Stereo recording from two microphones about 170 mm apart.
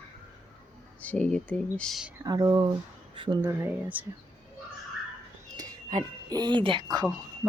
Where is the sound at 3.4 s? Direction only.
15° right (ahead or behind).